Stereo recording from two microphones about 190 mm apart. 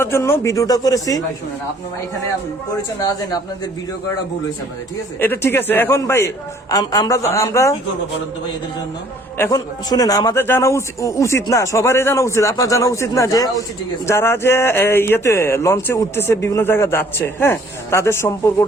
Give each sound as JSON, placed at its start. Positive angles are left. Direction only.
{"t": 0.0, "sound": "speech", "side_deg": 15}
{"t": 3.0, "sound": "speech", "side_deg": 20}
{"t": 5.2, "sound": "speech", "side_deg": 10}
{"t": 9.4, "sound": "speech", "side_deg": 20}